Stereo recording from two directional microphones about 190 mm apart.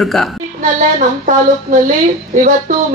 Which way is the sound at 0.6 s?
40° right (ahead or behind).